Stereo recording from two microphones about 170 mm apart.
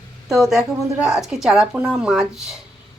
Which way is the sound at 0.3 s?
Centre (ahead or behind).